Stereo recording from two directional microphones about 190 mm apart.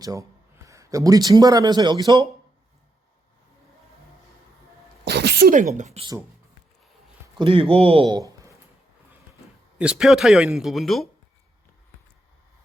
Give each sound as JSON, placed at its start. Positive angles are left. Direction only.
{"t": 0.0, "sound": "a man's voice", "side_deg": -20}
{"t": 5.0, "sound": "speech", "side_deg": -60}
{"t": 5.7, "sound": "speech", "side_deg": -35}
{"t": 7.3, "sound": "speech", "side_deg": -30}
{"t": 9.7, "sound": "speech", "side_deg": -5}